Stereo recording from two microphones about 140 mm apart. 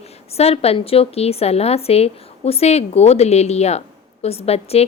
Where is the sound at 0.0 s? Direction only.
50° left (ahead or behind).